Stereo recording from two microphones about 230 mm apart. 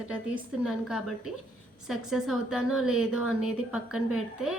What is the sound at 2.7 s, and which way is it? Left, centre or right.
A woman's voice, left.